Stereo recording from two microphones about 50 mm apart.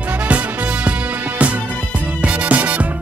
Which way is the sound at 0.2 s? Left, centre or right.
Right.